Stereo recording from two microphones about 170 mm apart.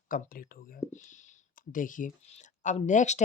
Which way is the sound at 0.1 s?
55° left (ahead or behind).